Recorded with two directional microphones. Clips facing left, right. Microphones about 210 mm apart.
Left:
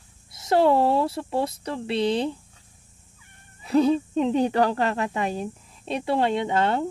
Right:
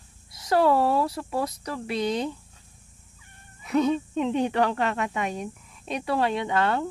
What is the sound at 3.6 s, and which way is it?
Speech, 35° left (ahead or behind).